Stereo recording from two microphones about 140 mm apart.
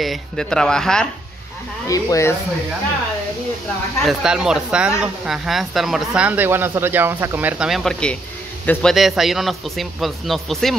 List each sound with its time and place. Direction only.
0.0 s a man's voice: centre (ahead or behind)
1.9 s speech: 20° left (ahead or behind)
4.0 s a man's voice: 5° right (ahead or behind)